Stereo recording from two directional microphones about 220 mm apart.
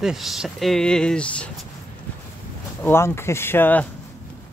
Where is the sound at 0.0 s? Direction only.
Centre (ahead or behind).